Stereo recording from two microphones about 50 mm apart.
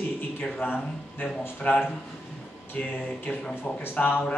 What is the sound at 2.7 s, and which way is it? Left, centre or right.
A man's voice, left.